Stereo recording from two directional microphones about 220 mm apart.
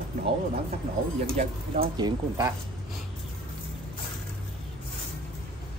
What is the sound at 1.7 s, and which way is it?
Speech, 20° right (ahead or behind).